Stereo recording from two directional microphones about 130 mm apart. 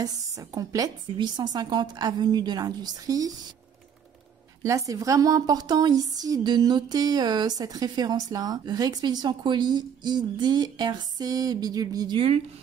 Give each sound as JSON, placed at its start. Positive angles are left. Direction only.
{"t": 0.0, "sound": "speech", "side_deg": -25}
{"t": 4.6, "sound": "speech", "side_deg": -25}